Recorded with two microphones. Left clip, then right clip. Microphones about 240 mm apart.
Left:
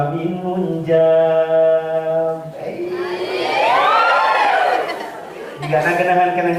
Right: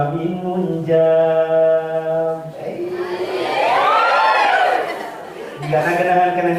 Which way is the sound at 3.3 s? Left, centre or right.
Centre.